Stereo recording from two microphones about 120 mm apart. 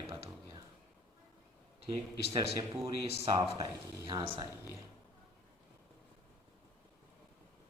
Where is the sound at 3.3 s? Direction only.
50° right (ahead or behind).